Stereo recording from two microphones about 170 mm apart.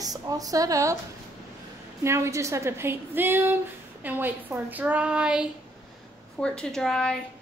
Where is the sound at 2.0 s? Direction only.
15° right (ahead or behind).